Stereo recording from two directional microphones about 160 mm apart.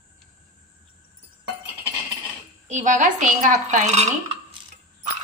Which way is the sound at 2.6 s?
50° right (ahead or behind).